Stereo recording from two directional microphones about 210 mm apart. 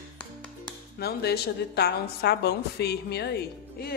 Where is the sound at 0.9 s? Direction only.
50° left (ahead or behind).